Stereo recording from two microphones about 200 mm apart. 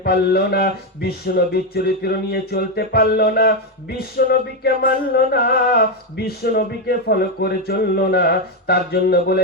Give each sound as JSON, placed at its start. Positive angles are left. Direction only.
{"t": 0.0, "sound": "music", "side_deg": 50}